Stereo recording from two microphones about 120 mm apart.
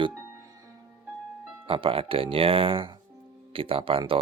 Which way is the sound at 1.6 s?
50° right (ahead or behind).